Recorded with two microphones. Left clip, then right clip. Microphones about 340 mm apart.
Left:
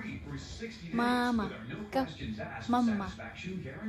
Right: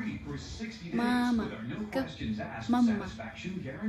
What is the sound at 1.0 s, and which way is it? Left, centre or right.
Music, centre.